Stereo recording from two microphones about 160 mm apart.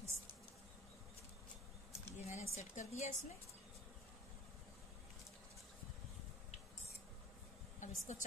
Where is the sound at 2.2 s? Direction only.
50° left (ahead or behind).